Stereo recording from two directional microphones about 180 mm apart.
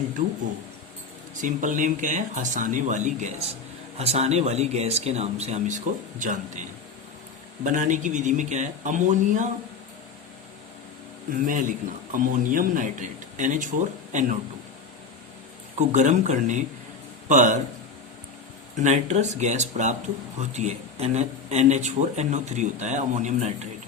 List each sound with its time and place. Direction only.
1.4 s speech: 45° right (ahead or behind)
11.4 s speech: 50° right (ahead or behind)
15.9 s a man's voice: 40° right (ahead or behind)
18.8 s speech: 40° right (ahead or behind)